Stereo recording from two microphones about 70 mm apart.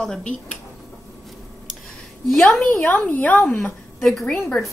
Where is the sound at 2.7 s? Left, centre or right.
Left.